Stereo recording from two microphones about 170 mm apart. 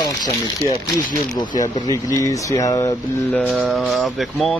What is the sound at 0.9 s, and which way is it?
Speech, 20° left (ahead or behind).